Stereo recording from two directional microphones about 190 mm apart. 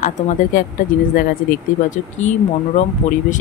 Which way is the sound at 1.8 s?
40° left (ahead or behind).